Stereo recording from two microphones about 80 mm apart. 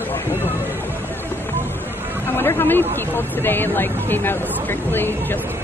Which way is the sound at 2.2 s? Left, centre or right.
Left.